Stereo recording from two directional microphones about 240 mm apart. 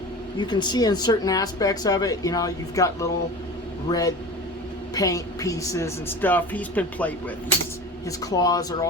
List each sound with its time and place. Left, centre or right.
0.3 s speech: centre
8.2 s speech: centre